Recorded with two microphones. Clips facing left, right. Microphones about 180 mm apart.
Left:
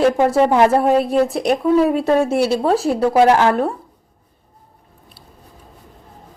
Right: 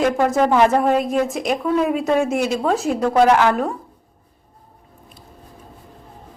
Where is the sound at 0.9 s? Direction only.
35° left (ahead or behind).